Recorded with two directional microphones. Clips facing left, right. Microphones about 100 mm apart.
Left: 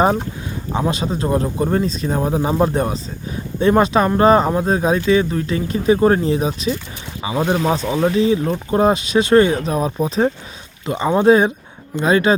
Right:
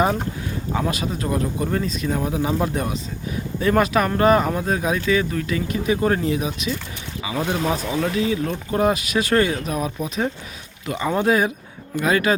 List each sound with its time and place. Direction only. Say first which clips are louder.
0.7 s speech: left 4 dB; 25° left (ahead or behind)